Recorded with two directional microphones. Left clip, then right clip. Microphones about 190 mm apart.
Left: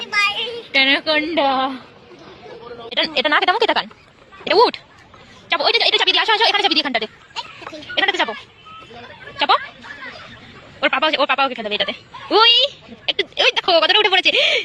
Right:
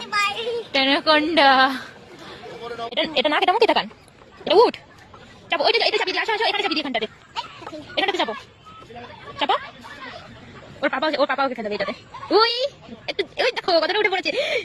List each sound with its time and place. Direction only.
0.0 s a sound: 45° right (ahead or behind)
0.7 s a woman's voice: centre (ahead or behind)
2.9 s a woman's voice: 10° right (ahead or behind)
6.0 s speech: centre (ahead or behind)
6.8 s a woman's voice: centre (ahead or behind)
7.9 s a woman's voice: 15° right (ahead or behind)
10.8 s a woman's voice: 5° right (ahead or behind)